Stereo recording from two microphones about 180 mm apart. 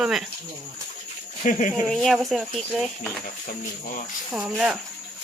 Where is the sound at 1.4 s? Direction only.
45° left (ahead or behind).